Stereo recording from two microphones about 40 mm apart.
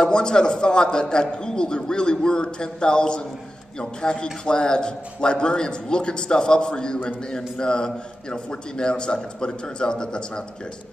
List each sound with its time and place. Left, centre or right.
0.0 s a man's voice: left